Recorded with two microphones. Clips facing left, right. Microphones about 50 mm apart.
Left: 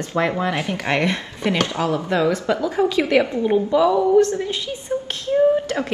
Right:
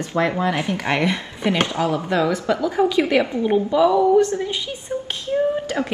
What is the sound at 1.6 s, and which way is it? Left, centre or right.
Speech, right.